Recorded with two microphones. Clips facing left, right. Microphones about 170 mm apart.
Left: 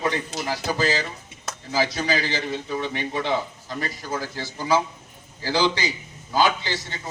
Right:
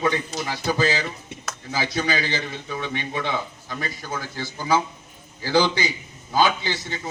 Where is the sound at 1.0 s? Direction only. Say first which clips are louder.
Right 1 dB; 35° left (ahead or behind).